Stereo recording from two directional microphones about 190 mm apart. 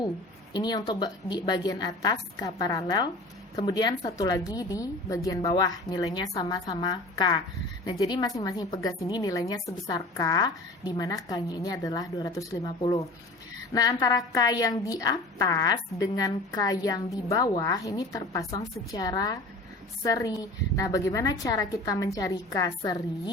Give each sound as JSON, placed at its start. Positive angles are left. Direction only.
{"t": 0.5, "sound": "a woman's voice", "side_deg": 20}